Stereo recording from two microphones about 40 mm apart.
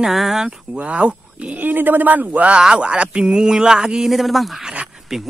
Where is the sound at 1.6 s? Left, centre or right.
Right.